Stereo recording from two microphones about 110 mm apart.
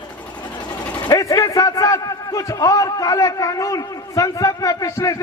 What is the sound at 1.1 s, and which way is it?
A man's voice, 30° left (ahead or behind).